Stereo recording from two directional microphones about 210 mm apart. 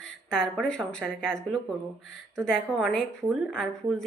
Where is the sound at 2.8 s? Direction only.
5° left (ahead or behind).